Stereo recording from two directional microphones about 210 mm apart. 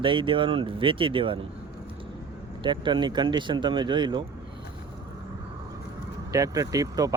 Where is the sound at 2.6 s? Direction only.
20° right (ahead or behind).